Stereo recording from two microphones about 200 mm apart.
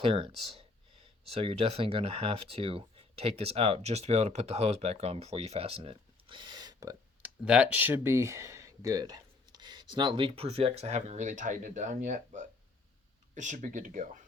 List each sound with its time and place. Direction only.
0.0 s speech: 25° right (ahead or behind)
7.4 s speech: 5° right (ahead or behind); by 14.2 s 40° right (ahead or behind)